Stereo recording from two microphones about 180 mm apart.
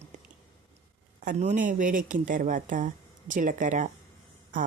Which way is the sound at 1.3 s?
40° right (ahead or behind).